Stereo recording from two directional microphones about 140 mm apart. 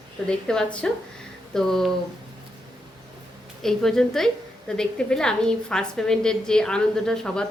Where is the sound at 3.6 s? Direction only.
5° left (ahead or behind).